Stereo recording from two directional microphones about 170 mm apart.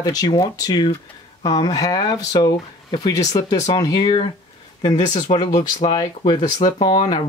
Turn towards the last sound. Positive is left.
turn(degrees=25)  # may be behind; listen again after turning